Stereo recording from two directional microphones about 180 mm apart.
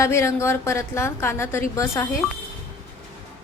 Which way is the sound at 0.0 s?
15° left (ahead or behind).